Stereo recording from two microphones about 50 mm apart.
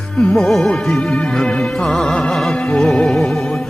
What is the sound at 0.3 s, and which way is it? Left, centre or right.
Music, centre.